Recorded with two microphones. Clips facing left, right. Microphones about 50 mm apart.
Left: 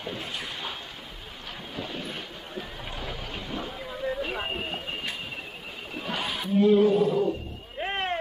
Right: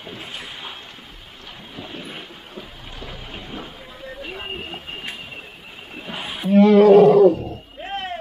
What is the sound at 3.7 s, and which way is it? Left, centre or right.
Vehicle, centre.